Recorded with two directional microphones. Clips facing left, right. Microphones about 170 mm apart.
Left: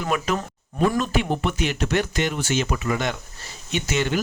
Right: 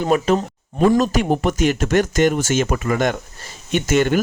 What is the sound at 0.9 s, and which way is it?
Speech, 40° right (ahead or behind).